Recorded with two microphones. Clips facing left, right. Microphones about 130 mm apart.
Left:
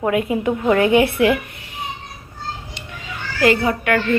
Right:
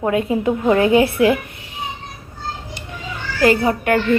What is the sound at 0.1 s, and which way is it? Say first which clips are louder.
A woman's voice: right 2 dB; 30° right (ahead or behind).